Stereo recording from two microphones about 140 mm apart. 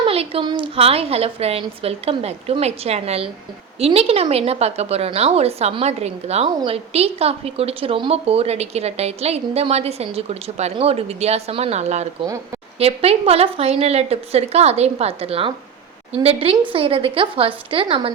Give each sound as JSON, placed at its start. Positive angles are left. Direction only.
{"t": 0.0, "sound": "a woman's voice", "side_deg": -45}